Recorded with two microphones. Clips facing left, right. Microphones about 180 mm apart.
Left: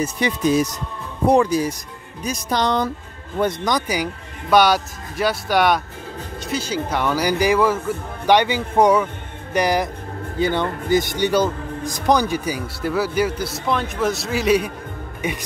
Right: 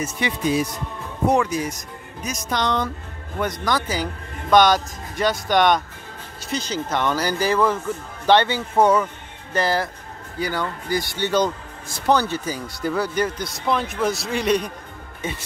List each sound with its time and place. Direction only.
0.0 s speech: 40° left (ahead or behind)
3.6 s speech: 15° left (ahead or behind)